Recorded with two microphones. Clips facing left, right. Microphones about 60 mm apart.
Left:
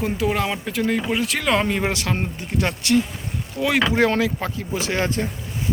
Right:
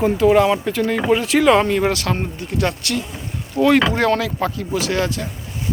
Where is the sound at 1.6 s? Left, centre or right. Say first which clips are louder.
Right 4 dB; centre.